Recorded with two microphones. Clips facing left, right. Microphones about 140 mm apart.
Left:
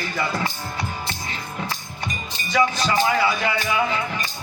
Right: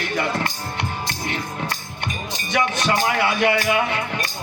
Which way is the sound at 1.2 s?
70° right (ahead or behind).